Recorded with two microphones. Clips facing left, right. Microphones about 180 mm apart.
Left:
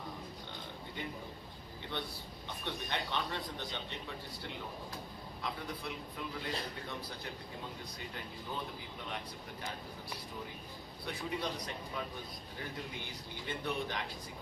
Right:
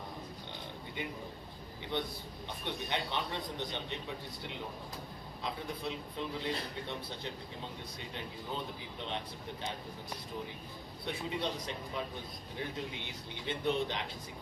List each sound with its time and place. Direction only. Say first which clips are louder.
1.9 s speech: right 5 dB; 20° right (ahead or behind)
5.4 s speech: right 2 dB; 25° right (ahead or behind)
11.0 s speech: right 2 dB; 25° right (ahead or behind)
13.5 s speech: right 5 dB; 20° right (ahead or behind)